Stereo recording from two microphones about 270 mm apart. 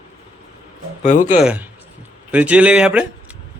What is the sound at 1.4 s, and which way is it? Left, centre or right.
A man's voice, centre.